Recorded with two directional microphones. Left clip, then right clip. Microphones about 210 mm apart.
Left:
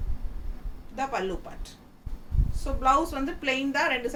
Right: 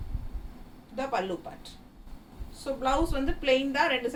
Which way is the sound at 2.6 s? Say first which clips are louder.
Left 4 dB; 10° left (ahead or behind).